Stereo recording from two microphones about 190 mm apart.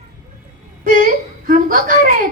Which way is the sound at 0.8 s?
45° right (ahead or behind).